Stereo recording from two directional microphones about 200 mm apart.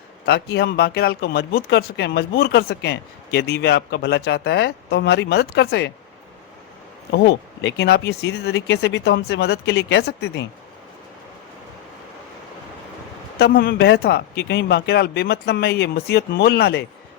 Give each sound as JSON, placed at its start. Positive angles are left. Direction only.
{"t": 0.3, "sound": "speech", "side_deg": 55}
{"t": 7.1, "sound": "speech", "side_deg": 60}
{"t": 13.4, "sound": "speech", "side_deg": 50}